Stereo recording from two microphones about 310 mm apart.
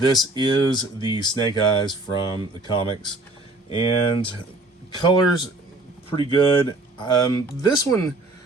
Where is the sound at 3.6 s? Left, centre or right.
Centre.